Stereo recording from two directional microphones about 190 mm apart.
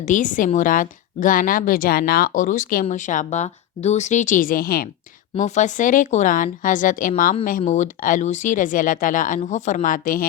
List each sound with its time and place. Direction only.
0.0 s a woman's voice: 40° left (ahead or behind)
5.4 s a woman's voice: 40° left (ahead or behind)